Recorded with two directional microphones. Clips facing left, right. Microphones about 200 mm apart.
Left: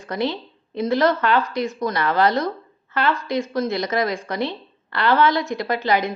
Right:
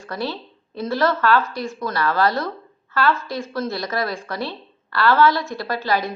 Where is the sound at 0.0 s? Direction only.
20° left (ahead or behind).